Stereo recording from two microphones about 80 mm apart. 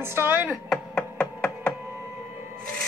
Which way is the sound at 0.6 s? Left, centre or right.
Centre.